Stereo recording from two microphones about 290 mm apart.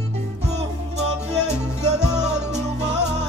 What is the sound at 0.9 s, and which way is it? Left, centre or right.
Music, right.